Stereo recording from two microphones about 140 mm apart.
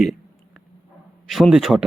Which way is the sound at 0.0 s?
Centre (ahead or behind).